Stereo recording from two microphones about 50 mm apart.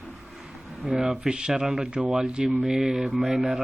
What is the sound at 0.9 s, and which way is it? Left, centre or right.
Speech, centre.